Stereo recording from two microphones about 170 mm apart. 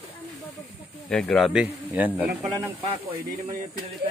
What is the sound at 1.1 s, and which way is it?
Speech, 5° left (ahead or behind).